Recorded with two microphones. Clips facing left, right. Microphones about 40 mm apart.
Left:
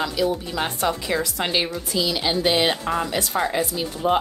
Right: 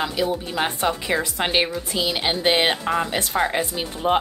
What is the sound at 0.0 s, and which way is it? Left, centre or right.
A woman's voice, right.